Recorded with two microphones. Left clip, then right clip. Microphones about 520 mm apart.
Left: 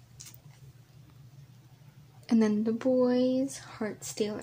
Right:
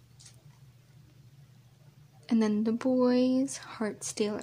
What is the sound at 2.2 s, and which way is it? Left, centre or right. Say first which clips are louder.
Speech: left 1 dB; right.